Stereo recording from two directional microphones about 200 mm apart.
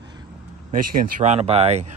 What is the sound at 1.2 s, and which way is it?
Speech, 30° right (ahead or behind).